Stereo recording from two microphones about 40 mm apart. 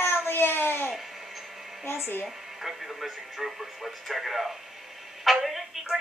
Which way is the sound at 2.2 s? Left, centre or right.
Centre.